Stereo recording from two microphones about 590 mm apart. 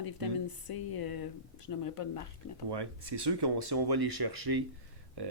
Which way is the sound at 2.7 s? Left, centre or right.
Right.